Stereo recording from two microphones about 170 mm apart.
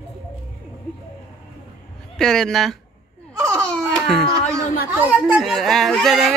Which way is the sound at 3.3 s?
20° right (ahead or behind).